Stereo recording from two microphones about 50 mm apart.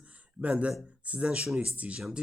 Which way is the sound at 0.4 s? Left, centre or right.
Right.